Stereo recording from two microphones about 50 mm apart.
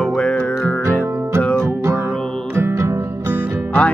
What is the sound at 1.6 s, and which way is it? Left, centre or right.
Music, right.